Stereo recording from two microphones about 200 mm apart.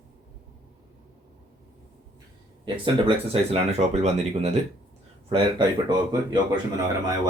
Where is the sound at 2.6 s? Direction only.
25° right (ahead or behind).